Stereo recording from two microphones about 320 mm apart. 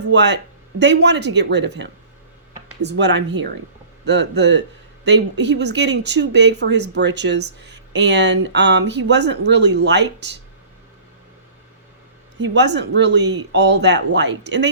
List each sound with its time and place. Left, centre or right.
0.0 s speech: right
12.4 s speech: right